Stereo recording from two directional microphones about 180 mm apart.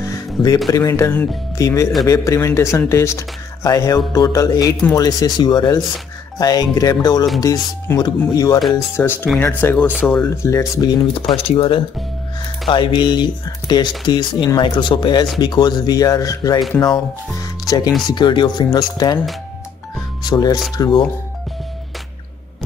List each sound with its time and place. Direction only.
0.0 s music: 20° left (ahead or behind)
0.7 s speech: 20° left (ahead or behind)
17.4 s music: 20° left (ahead or behind)
18.0 s speech: 25° left (ahead or behind)
20.2 s speech: 20° left (ahead or behind)